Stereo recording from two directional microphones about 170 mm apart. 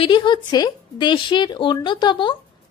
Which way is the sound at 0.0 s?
30° left (ahead or behind).